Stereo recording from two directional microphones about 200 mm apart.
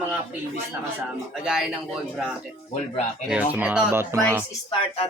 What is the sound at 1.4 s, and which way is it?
Speech, centre (ahead or behind).